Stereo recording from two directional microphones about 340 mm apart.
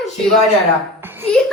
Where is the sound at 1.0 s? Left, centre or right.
Centre.